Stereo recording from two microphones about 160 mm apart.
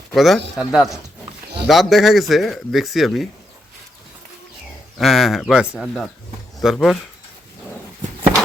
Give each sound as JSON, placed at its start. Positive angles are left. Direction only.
{"t": 0.1, "sound": "speech", "side_deg": 0}
{"t": 4.9, "sound": "speech", "side_deg": 0}